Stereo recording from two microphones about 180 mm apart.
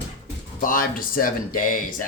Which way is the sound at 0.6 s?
50° left (ahead or behind).